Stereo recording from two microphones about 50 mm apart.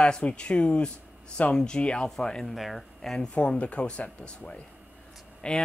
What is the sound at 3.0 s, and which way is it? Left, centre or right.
Speech, centre.